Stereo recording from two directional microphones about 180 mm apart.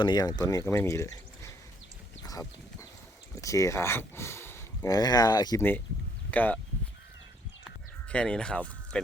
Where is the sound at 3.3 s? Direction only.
15° left (ahead or behind).